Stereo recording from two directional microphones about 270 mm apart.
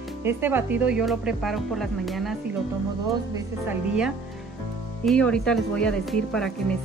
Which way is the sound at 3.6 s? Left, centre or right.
Centre.